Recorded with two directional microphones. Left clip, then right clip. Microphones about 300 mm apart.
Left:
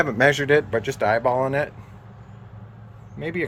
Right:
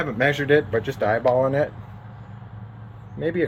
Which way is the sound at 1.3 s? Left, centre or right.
Left.